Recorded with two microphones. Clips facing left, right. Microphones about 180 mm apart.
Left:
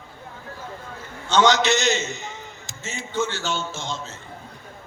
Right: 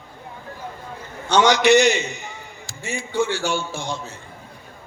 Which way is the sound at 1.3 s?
15° right (ahead or behind).